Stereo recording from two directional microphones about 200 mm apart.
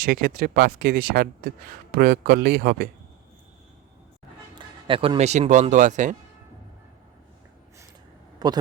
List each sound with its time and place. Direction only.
0.0 s speech: 45° right (ahead or behind)
4.5 s speech: 25° right (ahead or behind)
8.4 s a man's voice: 20° right (ahead or behind)